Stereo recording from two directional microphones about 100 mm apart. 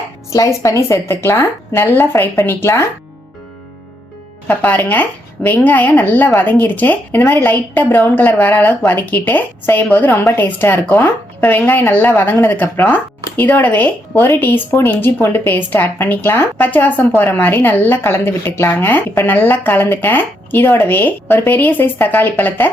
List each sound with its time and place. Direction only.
0.3 s speech: 30° left (ahead or behind)
4.4 s speech: 20° left (ahead or behind)